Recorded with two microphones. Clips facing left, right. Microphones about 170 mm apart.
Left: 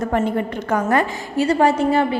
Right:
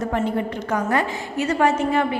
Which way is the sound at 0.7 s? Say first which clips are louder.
Left 4 dB; 50° left (ahead or behind).